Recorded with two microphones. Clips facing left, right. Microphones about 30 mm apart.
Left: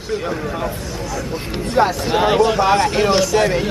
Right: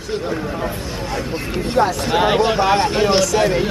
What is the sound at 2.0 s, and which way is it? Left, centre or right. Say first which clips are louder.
Speech: even; centre.